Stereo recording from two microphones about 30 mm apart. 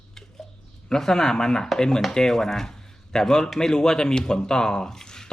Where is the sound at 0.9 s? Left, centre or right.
Centre.